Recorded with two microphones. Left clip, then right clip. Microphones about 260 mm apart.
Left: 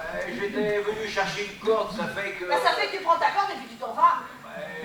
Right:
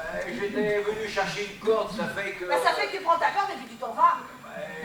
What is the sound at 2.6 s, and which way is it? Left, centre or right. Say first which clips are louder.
Speech: left 1 dB; centre.